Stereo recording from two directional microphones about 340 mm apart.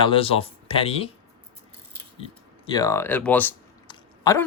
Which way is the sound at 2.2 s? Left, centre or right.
Centre.